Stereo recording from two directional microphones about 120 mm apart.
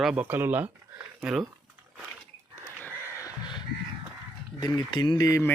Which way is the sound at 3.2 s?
40° left (ahead or behind).